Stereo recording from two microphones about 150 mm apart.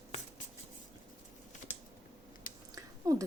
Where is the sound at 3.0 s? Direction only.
25° right (ahead or behind).